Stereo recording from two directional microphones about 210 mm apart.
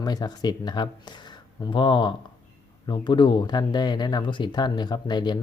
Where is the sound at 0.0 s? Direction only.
20° left (ahead or behind).